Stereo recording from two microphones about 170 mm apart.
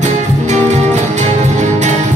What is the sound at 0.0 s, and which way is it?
Music, 45° right (ahead or behind).